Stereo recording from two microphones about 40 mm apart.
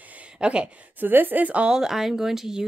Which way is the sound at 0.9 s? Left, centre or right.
Right.